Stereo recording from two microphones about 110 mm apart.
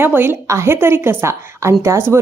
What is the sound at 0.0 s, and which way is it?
A woman's voice, 20° right (ahead or behind).